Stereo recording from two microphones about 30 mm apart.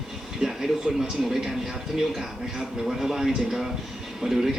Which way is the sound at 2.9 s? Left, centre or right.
Centre.